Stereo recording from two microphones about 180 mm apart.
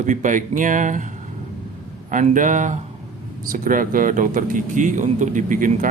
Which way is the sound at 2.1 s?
45° right (ahead or behind).